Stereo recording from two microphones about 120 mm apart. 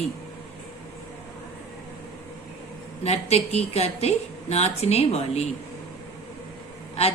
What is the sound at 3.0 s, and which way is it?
A woman's voice, 60° left (ahead or behind).